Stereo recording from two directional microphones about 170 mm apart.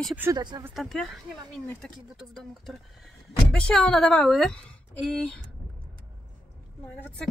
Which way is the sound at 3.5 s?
5° left (ahead or behind).